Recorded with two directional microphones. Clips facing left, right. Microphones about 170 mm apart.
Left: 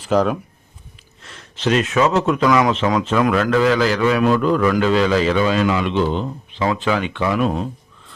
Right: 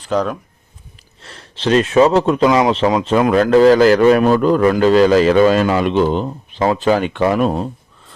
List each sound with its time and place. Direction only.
0.0 s speech: 5° left (ahead or behind)
1.2 s speech: 35° right (ahead or behind)